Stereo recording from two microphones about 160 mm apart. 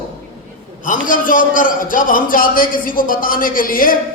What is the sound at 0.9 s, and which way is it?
A man's voice, 55° left (ahead or behind).